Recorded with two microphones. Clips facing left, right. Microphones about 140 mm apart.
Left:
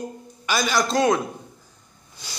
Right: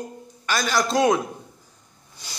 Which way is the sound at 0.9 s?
10° right (ahead or behind).